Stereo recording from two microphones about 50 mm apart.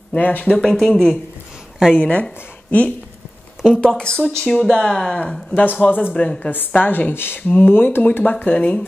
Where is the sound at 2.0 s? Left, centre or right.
Left.